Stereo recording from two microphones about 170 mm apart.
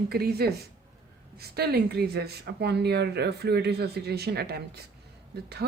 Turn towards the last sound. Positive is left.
turn(degrees=-70)  # may be behind; listen again after turning